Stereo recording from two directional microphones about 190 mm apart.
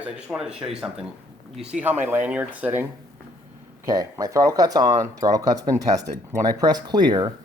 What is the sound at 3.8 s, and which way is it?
Speech, 20° right (ahead or behind).